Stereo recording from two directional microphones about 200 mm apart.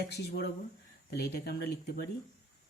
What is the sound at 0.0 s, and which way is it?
Speech, 55° left (ahead or behind).